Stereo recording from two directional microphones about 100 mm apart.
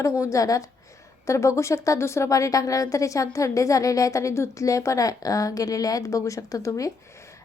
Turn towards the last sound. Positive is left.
turn(degrees=35)  # may be behind; listen again after turning